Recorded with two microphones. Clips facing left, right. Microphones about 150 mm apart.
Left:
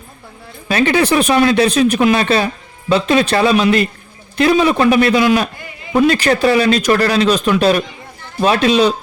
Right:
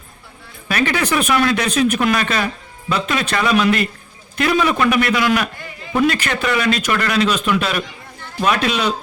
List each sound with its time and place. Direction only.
0.7 s speech: 30° left (ahead or behind)